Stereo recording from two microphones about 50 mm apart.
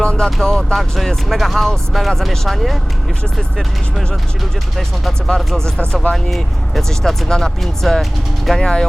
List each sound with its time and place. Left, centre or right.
0.0 s vehicle: centre
0.4 s speech: centre
4.8 s speech: centre
6.3 s speech: centre